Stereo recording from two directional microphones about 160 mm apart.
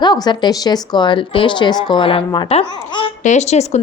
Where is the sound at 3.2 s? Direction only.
45° left (ahead or behind).